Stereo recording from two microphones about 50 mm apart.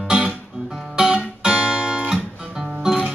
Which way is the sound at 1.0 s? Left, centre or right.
Centre.